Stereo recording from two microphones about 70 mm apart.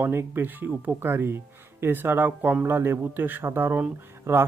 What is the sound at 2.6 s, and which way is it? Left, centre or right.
Speech, right.